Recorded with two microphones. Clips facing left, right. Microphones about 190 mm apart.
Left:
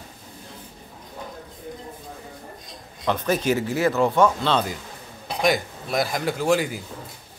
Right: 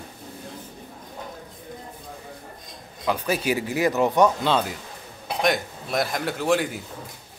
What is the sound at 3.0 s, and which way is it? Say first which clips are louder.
A man's voice: left 2 dB; 10° right (ahead or behind).